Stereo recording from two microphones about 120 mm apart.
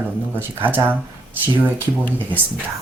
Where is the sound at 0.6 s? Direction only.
15° right (ahead or behind).